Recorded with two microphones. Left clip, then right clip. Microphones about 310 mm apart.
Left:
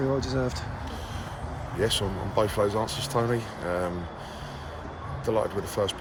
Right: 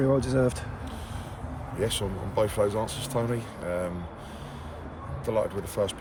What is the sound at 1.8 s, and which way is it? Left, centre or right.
Speech, centre.